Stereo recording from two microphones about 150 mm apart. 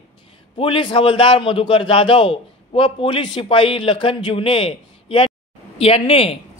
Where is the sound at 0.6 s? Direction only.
35° left (ahead or behind).